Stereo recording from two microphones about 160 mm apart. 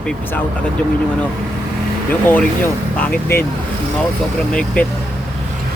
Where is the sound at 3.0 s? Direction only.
15° left (ahead or behind).